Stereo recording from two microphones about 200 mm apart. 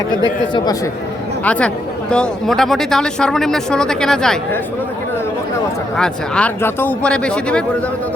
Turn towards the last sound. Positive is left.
turn(degrees=5)  # may be behind; listen again after turning